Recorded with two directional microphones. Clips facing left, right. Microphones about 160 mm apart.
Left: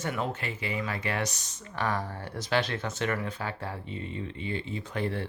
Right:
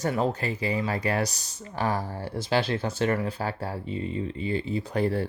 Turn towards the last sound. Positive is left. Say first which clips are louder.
# right 6 dB
turn(degrees=-40)  # may be behind; listen again after turning